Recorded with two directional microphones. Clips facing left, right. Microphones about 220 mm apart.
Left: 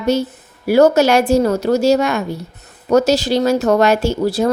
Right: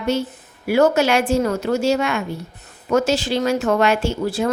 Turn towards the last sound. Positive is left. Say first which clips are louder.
# left 5 dB
turn(degrees=40)  # may be behind; listen again after turning